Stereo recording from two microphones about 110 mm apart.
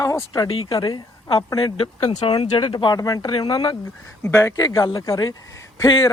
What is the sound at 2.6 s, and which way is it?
Speech, 45° left (ahead or behind).